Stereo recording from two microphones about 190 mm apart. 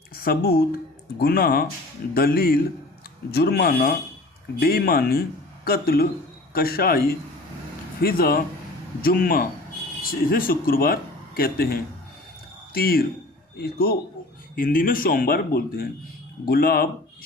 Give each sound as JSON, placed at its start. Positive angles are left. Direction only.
{"t": 0.2, "sound": "speech", "side_deg": 55}